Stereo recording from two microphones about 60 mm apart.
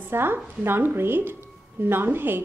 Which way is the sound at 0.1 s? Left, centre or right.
Right.